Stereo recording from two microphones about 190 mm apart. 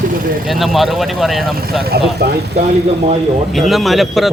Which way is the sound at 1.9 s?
55° right (ahead or behind).